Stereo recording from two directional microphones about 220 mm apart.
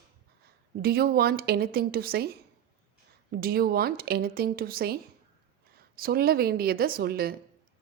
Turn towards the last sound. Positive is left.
turn(degrees=-45)  # may be behind; listen again after turning